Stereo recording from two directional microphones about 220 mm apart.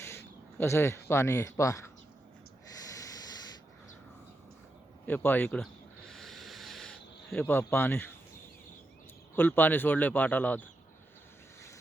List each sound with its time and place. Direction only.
0.6 s speech: 10° left (ahead or behind)
2.9 s sanding: 15° left (ahead or behind)
5.0 s speech: 10° left (ahead or behind)
6.1 s snake: centre (ahead or behind)
7.6 s speech: 10° left (ahead or behind)
9.3 s speech: 10° left (ahead or behind)